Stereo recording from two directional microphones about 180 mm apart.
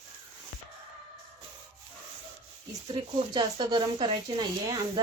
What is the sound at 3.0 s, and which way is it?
Speech, 25° right (ahead or behind).